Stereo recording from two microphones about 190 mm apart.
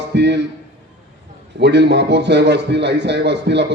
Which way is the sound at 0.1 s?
60° right (ahead or behind).